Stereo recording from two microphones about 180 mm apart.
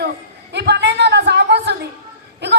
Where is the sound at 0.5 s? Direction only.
70° right (ahead or behind).